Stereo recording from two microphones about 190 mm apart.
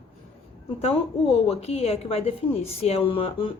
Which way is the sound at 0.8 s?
30° left (ahead or behind).